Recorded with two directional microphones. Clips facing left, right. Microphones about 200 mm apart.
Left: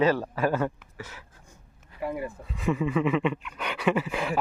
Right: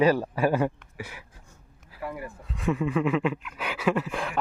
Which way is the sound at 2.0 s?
20° left (ahead or behind).